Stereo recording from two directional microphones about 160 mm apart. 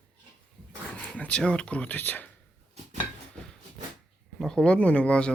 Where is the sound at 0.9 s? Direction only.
5° left (ahead or behind).